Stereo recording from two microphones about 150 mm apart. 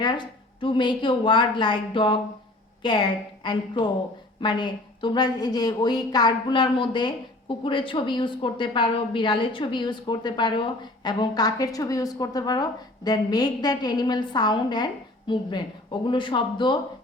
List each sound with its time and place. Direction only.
0.0 s a woman's voice: 30° left (ahead or behind)